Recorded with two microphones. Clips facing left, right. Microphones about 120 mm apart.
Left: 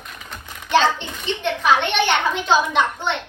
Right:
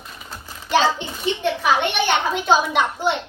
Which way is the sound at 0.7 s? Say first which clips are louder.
Left 1 dB; 10° right (ahead or behind).